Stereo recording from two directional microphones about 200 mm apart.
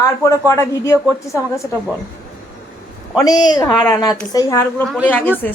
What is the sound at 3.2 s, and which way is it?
A woman's voice, 20° left (ahead or behind).